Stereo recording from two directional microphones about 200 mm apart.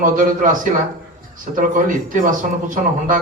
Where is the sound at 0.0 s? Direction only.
40° right (ahead or behind).